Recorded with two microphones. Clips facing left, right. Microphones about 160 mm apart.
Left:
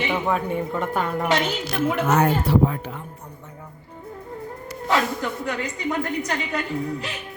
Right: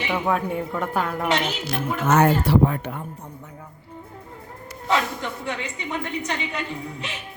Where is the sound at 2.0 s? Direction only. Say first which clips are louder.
Right 5 dB; 80° right.